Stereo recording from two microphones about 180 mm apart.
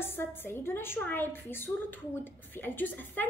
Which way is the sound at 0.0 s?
10° left (ahead or behind).